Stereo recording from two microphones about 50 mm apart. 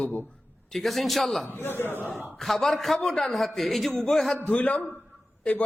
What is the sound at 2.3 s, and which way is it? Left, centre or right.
A man's voice, centre.